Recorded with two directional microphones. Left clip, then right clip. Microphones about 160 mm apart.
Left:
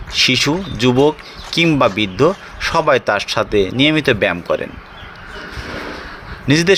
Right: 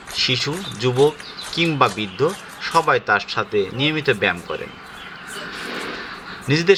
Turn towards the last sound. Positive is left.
turn(degrees=55)  # may be behind; listen again after turning